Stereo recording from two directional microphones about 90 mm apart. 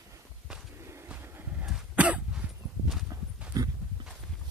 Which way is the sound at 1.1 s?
20° right (ahead or behind).